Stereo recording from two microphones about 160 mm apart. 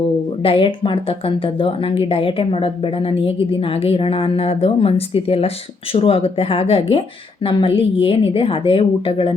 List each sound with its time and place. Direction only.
0.4 s a woman's voice: 35° left (ahead or behind)